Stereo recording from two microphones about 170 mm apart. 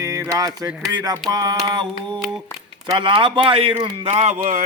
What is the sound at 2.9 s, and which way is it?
Speech, 30° right (ahead or behind).